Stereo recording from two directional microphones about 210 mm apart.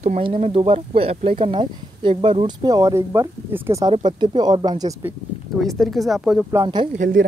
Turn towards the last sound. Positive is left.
turn(degrees=-40)  # may be behind; listen again after turning